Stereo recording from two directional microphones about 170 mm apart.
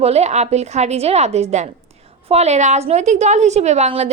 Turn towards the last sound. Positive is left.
turn(degrees=-40)  # may be behind; listen again after turning